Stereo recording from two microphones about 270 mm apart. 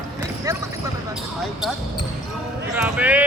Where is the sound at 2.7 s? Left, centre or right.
Centre.